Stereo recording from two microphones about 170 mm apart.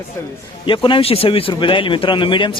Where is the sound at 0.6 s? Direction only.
30° left (ahead or behind).